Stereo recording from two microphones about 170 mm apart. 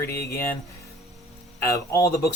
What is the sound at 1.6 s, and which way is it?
Speech, 20° left (ahead or behind).